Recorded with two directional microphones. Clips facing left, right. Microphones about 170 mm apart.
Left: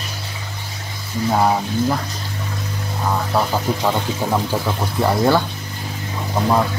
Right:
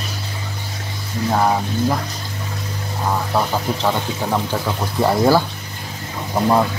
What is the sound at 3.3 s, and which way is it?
Speech, centre (ahead or behind).